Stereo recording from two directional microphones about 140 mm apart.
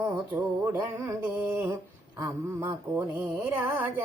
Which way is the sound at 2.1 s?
25° right (ahead or behind).